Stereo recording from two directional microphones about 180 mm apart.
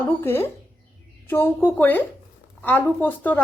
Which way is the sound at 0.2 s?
15° left (ahead or behind).